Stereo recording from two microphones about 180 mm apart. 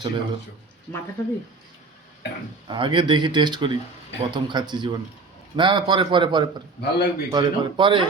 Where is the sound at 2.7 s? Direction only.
25° right (ahead or behind).